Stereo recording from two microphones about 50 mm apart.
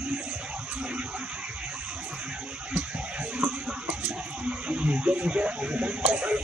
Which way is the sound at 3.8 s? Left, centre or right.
Right.